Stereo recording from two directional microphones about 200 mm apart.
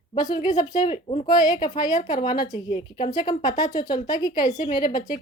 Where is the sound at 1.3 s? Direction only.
20° left (ahead or behind).